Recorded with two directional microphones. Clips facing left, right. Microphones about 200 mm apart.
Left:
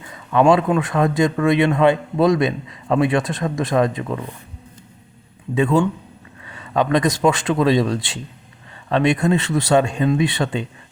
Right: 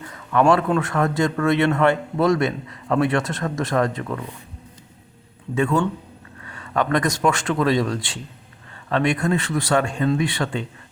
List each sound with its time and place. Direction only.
0.1 s a man's voice: 15° left (ahead or behind)
5.5 s a man's voice: 15° left (ahead or behind)